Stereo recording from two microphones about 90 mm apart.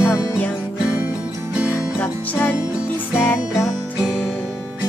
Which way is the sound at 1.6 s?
20° left (ahead or behind).